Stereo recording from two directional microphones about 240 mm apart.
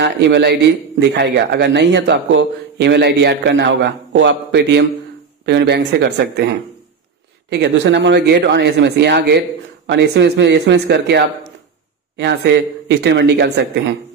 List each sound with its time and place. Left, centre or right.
0.0 s a man's voice: right
12.8 s a man's voice: right